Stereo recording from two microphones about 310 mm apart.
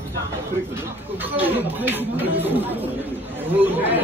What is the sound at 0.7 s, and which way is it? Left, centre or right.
Speech, centre.